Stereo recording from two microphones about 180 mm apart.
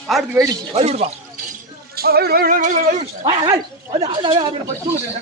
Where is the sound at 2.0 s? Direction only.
60° right (ahead or behind).